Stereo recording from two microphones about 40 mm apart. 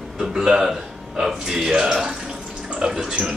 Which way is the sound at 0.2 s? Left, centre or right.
Centre.